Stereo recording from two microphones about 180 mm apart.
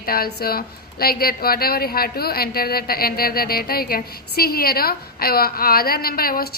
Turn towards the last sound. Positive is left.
turn(degrees=55)  # may be behind; listen again after turning